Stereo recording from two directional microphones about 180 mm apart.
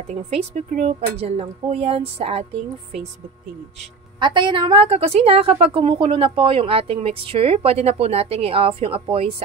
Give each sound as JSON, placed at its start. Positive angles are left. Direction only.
{"t": 0.1, "sound": "a woman's voice", "side_deg": -40}
{"t": 4.2, "sound": "a woman's voice", "side_deg": -25}